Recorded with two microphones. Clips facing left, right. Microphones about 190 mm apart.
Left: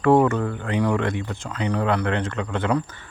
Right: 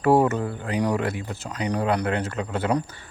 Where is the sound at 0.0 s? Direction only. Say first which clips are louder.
Left 2 dB; 30° right (ahead or behind).